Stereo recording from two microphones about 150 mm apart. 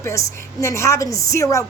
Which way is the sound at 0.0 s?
20° left (ahead or behind).